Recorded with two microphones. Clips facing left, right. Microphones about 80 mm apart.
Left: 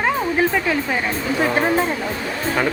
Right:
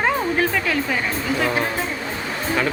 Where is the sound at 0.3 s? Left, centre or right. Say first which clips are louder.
Left 2 dB; centre.